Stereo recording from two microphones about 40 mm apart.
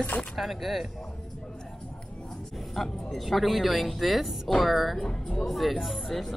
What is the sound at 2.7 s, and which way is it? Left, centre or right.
Speech, centre.